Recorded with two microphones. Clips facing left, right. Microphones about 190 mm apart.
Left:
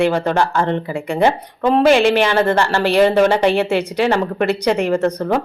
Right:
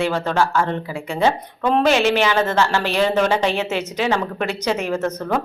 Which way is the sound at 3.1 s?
10° left (ahead or behind).